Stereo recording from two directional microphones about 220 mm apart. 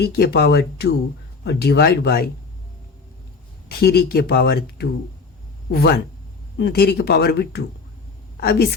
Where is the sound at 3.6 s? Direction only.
45° left (ahead or behind).